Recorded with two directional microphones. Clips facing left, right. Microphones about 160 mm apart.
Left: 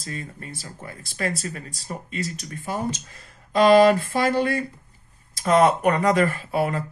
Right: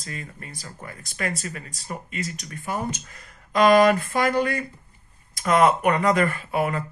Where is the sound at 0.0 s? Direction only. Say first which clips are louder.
Left 3 dB; 30° left (ahead or behind).